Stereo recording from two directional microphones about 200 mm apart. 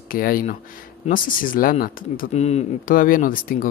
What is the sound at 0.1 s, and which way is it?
Speech, 45° left (ahead or behind).